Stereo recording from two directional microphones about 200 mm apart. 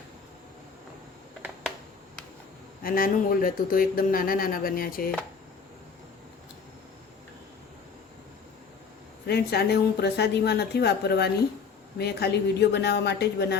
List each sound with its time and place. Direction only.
2.8 s speech: 45° left (ahead or behind)
9.2 s a woman's voice: 55° left (ahead or behind)